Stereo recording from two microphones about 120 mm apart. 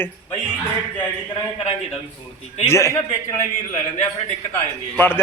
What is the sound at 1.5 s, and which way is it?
Speech, 60° left (ahead or behind).